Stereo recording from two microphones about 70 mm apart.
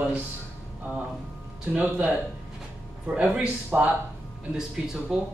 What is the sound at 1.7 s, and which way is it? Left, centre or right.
A man's voice, centre.